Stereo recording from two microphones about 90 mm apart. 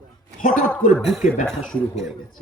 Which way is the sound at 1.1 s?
Centre (ahead or behind).